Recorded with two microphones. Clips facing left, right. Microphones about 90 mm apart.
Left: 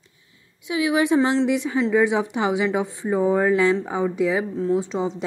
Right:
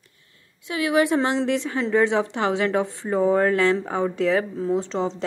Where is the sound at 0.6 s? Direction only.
20° left (ahead or behind).